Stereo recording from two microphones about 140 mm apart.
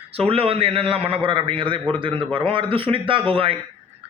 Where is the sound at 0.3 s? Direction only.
45° right (ahead or behind).